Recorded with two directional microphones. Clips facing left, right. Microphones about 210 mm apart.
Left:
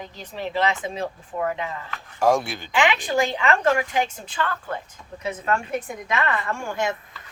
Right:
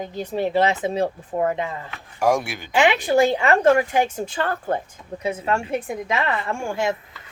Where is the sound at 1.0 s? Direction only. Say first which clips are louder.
Right 4 dB; 30° right (ahead or behind).